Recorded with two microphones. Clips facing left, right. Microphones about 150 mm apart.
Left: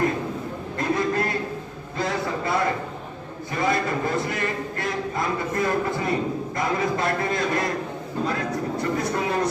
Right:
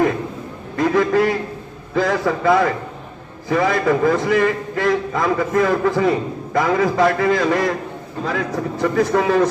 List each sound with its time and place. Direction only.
0.8 s a man's voice: 90° right